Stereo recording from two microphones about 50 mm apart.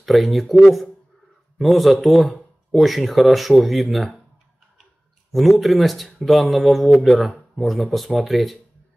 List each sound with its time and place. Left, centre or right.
0.0 s speech: centre
1.6 s speech: centre
5.3 s speech: centre